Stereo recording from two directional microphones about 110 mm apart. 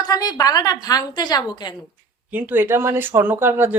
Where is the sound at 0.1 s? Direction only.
35° left (ahead or behind).